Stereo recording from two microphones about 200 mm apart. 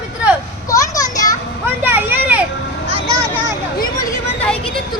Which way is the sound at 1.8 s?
10° right (ahead or behind).